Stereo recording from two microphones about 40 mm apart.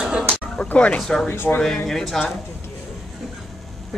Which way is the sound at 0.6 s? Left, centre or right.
Left.